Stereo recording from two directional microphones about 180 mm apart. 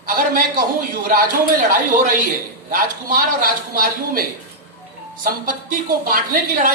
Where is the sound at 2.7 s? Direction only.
50° right (ahead or behind).